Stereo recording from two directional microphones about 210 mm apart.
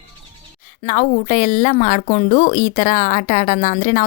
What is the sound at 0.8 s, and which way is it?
A woman's voice, 40° left (ahead or behind).